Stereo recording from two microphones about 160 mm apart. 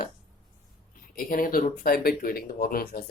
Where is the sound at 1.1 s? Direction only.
65° left (ahead or behind).